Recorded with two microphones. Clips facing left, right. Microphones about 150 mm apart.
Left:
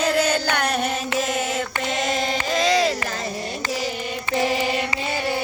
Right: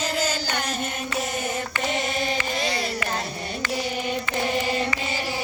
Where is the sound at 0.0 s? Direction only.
60° left (ahead or behind); by 2.9 s 90° left.